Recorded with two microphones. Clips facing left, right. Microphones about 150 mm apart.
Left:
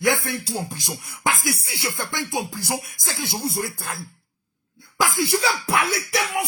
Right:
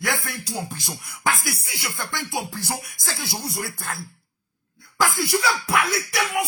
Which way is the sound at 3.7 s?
10° left (ahead or behind).